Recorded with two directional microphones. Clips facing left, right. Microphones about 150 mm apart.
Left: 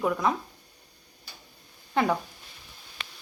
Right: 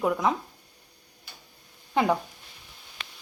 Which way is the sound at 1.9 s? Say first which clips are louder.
Right 1 dB; 15° right (ahead or behind).